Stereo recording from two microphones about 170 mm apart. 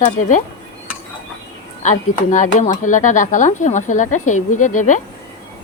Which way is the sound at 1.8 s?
45° left (ahead or behind).